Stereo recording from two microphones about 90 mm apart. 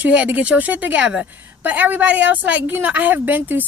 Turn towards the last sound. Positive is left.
turn(degrees=-20)  # may be behind; listen again after turning